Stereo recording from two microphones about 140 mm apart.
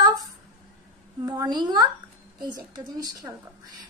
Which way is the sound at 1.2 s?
25° right (ahead or behind).